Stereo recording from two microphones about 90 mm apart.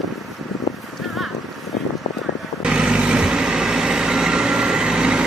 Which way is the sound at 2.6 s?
10° right (ahead or behind).